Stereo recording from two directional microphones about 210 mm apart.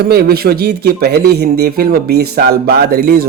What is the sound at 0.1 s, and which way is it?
Speech, 50° right (ahead or behind).